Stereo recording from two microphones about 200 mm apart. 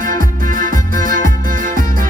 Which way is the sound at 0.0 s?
45° right (ahead or behind).